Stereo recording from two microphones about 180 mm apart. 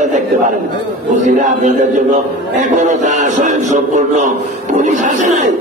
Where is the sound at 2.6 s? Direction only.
45° right (ahead or behind).